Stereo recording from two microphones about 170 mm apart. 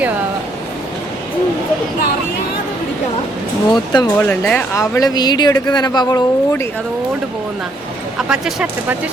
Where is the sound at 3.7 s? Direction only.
25° left (ahead or behind).